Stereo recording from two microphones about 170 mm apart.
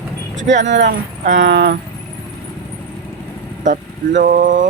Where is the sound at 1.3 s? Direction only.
80° right.